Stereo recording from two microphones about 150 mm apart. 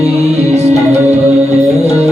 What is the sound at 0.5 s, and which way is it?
Music, 45° right (ahead or behind).